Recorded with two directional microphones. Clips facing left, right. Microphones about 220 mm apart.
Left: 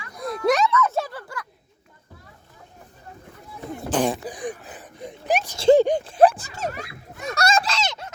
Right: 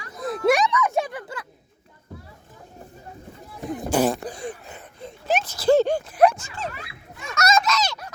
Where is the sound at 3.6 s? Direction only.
15° right (ahead or behind).